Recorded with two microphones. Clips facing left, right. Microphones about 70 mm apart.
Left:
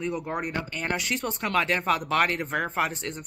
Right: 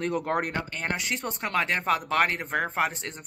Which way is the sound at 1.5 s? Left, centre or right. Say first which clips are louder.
Left 1 dB; right.